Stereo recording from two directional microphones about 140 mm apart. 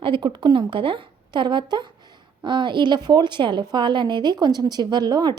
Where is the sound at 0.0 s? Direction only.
35° right (ahead or behind).